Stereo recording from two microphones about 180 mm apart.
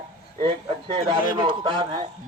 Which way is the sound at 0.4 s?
25° right (ahead or behind).